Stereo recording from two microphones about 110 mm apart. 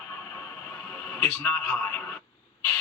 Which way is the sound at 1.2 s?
15° left (ahead or behind).